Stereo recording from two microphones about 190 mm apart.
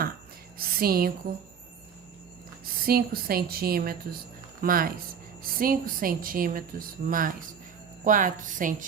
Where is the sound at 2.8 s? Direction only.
55° right (ahead or behind).